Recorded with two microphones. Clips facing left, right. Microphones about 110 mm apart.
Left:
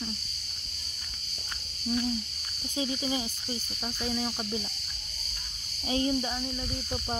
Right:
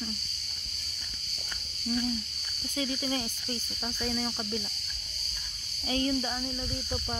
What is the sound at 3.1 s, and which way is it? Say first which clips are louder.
Cricket: even; 10° left (ahead or behind).